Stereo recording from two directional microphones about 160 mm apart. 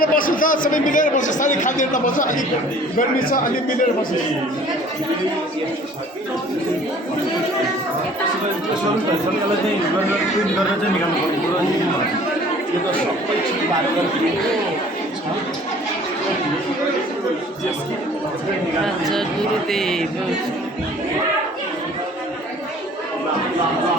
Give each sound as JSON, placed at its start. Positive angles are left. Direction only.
{"t": 0.0, "sound": "a man's voice", "side_deg": 60}
{"t": 19.7, "sound": "music", "side_deg": 0}